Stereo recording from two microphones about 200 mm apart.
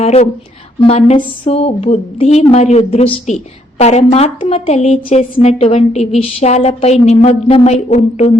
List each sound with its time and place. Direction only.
0.0 s a woman's voice: 30° left (ahead or behind)